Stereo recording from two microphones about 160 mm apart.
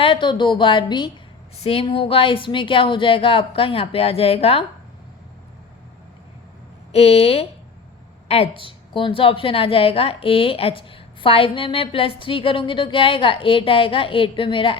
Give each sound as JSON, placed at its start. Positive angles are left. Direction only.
{"t": 0.0, "sound": "a woman's voice", "side_deg": 30}
{"t": 6.9, "sound": "a woman's voice", "side_deg": 40}